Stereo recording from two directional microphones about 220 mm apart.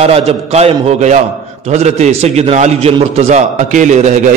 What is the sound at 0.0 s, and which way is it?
A man's voice, 25° right (ahead or behind).